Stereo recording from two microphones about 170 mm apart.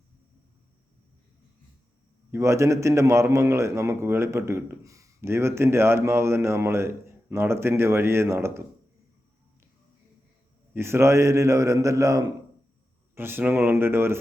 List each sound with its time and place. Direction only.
2.3 s a man's voice: 15° right (ahead or behind)
10.8 s a man's voice: 15° right (ahead or behind)